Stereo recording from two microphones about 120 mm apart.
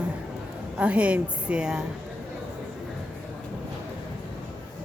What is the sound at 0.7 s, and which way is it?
A woman's voice, 10° right (ahead or behind).